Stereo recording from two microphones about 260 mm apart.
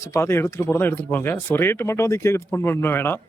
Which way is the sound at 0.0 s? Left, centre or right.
Centre.